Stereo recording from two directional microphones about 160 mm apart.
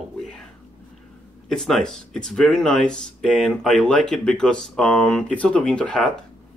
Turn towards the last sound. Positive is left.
turn(degrees=5)  # may be behind; listen again after turning